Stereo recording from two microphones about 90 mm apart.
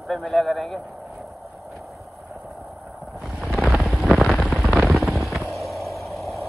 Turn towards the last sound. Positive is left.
turn(degrees=0)  # may be behind; listen again after turning